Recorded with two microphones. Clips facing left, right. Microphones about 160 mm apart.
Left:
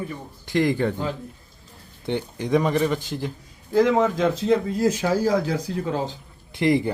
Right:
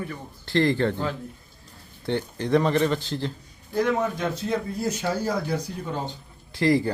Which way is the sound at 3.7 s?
90° left.